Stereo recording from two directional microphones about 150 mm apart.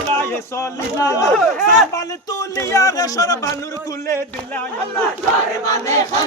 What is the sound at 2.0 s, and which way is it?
Speech, 20° left (ahead or behind).